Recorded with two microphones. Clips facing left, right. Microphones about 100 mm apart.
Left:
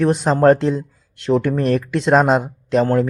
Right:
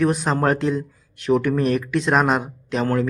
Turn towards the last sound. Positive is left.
turn(degrees=35)  # may be behind; listen again after turning